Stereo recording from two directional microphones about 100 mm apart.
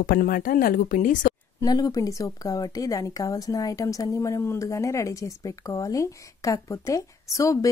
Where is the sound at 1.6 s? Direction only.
40° left (ahead or behind).